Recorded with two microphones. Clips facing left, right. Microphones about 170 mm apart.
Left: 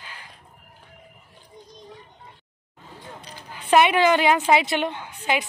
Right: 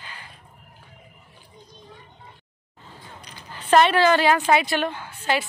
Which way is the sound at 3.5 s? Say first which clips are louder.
Right 1 dB; 10° left (ahead or behind).